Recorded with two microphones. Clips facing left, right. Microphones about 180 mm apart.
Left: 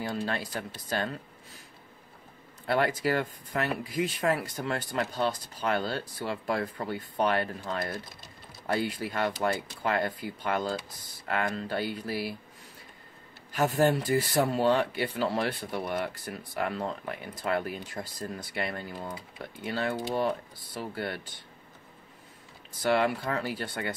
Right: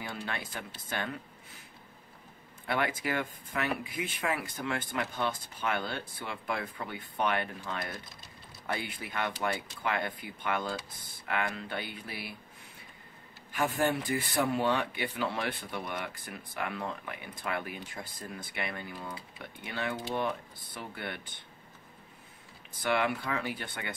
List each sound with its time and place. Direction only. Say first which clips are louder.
0.0 s speech: left 6 dB; 40° left (ahead or behind)
2.6 s speech: left 5 dB; 40° left (ahead or behind)
13.7 s speech: left 7 dB; 40° left (ahead or behind)
17.1 s speech: left 6 dB; 40° left (ahead or behind)
22.8 s speech: left 4 dB; 40° left (ahead or behind)